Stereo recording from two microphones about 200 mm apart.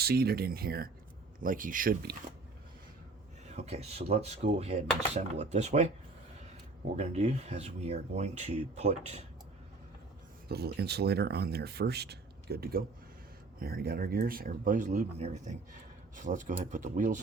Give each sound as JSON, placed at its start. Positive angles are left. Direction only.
{"t": 0.0, "sound": "speech", "side_deg": -50}
{"t": 3.5, "sound": "speech", "side_deg": -30}
{"t": 6.9, "sound": "speech", "side_deg": -35}
{"t": 10.5, "sound": "speech", "side_deg": -55}